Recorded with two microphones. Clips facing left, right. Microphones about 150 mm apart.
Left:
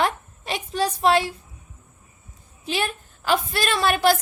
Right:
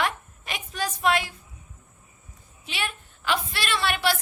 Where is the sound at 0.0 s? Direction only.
30° left (ahead or behind).